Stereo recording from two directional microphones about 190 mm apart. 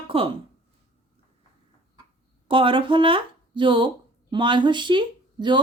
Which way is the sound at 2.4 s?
25° right (ahead or behind).